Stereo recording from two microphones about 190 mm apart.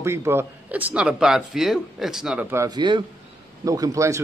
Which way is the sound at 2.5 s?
20° right (ahead or behind).